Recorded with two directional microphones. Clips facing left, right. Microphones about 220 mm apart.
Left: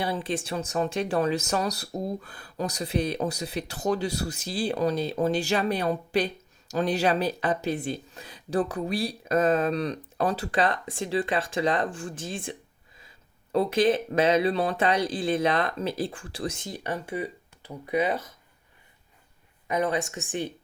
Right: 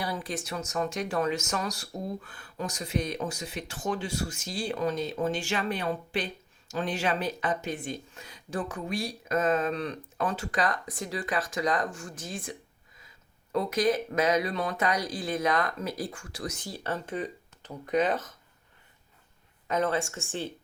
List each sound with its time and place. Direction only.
0.0 s speech: 25° left (ahead or behind); by 18.3 s 10° left (ahead or behind)
19.6 s speech: 15° left (ahead or behind)